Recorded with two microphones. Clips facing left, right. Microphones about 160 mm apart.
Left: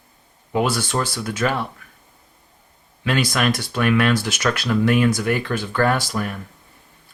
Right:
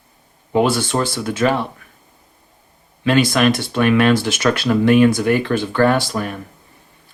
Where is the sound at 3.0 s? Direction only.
25° right (ahead or behind).